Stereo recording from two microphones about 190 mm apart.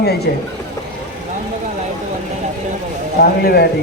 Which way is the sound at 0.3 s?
60° left (ahead or behind).